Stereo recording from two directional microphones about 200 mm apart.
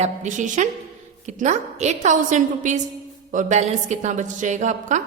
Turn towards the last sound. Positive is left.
turn(degrees=-35)  # may be behind; listen again after turning